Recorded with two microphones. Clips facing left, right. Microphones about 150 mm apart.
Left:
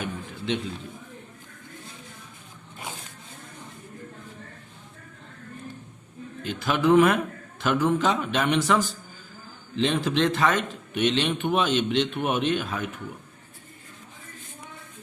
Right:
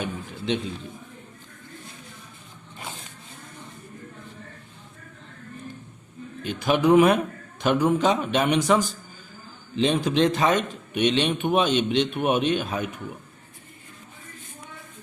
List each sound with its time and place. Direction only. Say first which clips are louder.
0.0 s a man's voice: right 2 dB; 20° right (ahead or behind)
6.6 s a man's voice: right 2 dB; 15° right (ahead or behind)